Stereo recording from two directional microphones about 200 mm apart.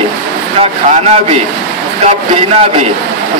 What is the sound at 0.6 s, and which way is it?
A man's voice, 30° right (ahead or behind).